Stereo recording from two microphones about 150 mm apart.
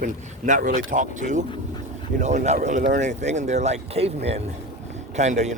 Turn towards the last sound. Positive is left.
turn(degrees=-50)  # may be behind; listen again after turning